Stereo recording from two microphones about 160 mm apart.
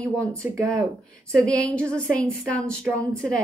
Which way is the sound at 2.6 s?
15° right (ahead or behind).